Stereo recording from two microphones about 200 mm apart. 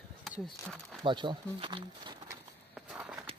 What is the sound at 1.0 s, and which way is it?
Speech, 25° right (ahead or behind).